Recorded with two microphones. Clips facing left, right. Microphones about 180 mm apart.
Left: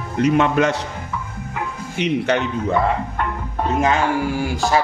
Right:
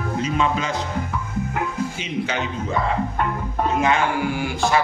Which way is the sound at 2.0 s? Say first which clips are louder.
Left 6 dB; 65° left (ahead or behind).